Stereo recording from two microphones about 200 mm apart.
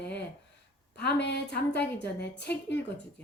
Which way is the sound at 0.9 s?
55° left (ahead or behind).